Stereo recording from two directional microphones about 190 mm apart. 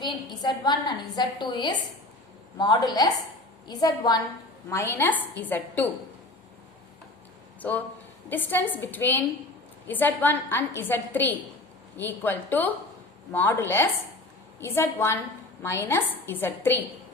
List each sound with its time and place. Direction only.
0.0 s a woman's voice: 25° left (ahead or behind)
7.6 s a woman's voice: 10° left (ahead or behind)